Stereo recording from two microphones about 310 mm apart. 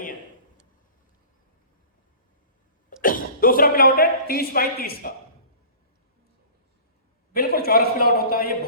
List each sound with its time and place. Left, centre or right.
3.0 s speech: left
7.3 s a man's voice: left